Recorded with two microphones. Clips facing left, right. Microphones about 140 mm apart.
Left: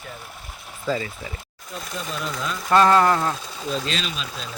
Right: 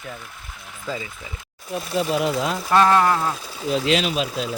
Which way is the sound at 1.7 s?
80° right.